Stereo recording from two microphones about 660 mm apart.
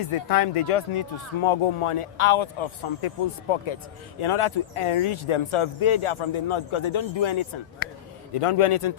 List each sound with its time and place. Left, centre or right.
0.0 s speech: left
4.2 s speech: left